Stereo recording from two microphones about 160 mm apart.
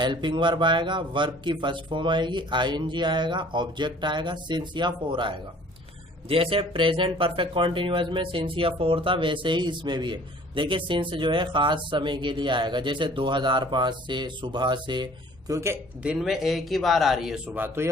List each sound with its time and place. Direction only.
0.0 s speech: 30° right (ahead or behind)
16.0 s speech: centre (ahead or behind)